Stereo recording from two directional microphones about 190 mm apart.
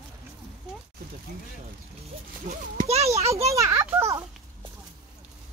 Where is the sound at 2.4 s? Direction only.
40° right (ahead or behind).